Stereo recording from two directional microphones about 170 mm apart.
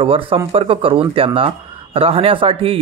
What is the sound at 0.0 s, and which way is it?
Speech, 30° right (ahead or behind).